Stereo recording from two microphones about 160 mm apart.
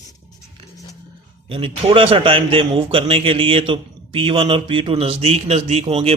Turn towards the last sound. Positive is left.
turn(degrees=-40)  # may be behind; listen again after turning